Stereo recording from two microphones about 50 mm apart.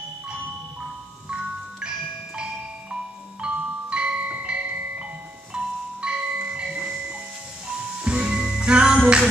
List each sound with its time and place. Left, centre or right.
1.8 s music: centre
5.5 s marimba: centre
8.0 s music: centre